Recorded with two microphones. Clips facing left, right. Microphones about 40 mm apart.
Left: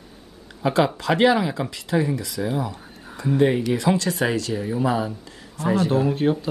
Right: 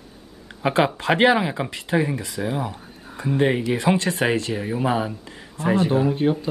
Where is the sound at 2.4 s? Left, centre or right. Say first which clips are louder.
Even; centre.